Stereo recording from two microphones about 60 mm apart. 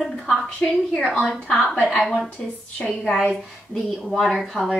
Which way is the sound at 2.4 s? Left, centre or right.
Centre.